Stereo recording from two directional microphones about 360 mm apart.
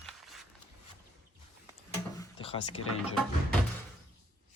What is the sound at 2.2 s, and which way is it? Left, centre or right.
Drawer open or close, centre.